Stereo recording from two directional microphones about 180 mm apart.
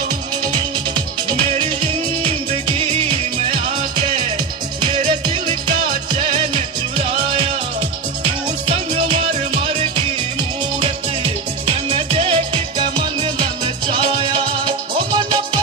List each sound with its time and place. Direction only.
2.7 s music: 30° right (ahead or behind)
8.7 s music: 30° right (ahead or behind)
10.8 s music: 25° right (ahead or behind)
14.9 s music: 25° right (ahead or behind)